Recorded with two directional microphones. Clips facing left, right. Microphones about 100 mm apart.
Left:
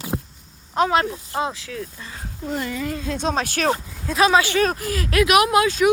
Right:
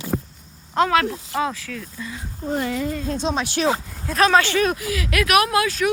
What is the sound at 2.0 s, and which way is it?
Speech, 30° left (ahead or behind).